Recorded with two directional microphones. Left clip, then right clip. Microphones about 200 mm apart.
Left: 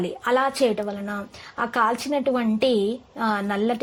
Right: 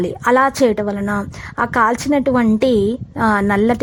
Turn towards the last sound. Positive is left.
turn(degrees=-35)  # may be behind; listen again after turning